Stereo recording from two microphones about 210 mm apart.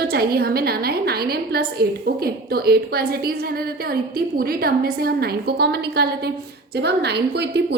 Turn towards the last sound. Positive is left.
turn(degrees=-50)  # may be behind; listen again after turning